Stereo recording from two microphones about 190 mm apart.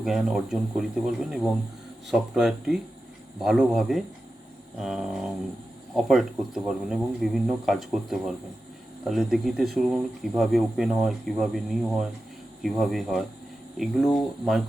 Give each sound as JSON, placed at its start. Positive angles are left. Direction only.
{"t": 0.0, "sound": "speech", "side_deg": 0}